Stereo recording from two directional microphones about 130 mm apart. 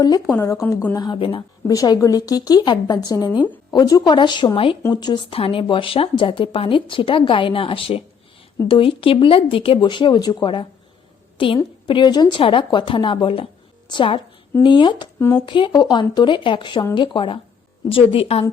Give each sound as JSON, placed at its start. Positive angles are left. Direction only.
{"t": 0.6, "sound": "speech", "side_deg": 15}
{"t": 0.9, "sound": "speech", "side_deg": 35}
{"t": 1.6, "sound": "a woman's voice", "side_deg": 25}
{"t": 15.2, "sound": "speech", "side_deg": 15}
{"t": 15.4, "sound": "a woman's voice", "side_deg": 40}